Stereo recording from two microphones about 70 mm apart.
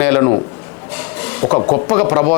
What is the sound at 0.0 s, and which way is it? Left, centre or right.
A man's voice, left.